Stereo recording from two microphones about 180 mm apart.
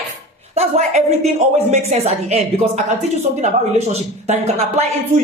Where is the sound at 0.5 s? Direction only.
40° right (ahead or behind).